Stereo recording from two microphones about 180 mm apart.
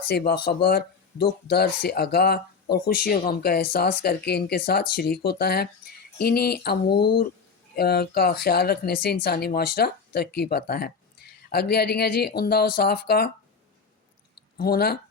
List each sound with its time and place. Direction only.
0.1 s speech: 60° left (ahead or behind)
14.6 s speech: 60° left (ahead or behind)